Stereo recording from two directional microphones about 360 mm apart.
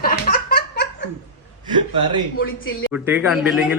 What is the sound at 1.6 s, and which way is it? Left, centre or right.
Speech, centre.